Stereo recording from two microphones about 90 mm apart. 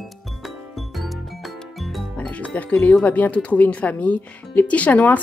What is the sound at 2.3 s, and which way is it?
Speech, 15° left (ahead or behind).